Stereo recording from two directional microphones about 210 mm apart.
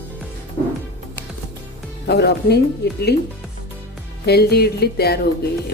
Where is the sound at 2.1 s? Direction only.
50° left (ahead or behind).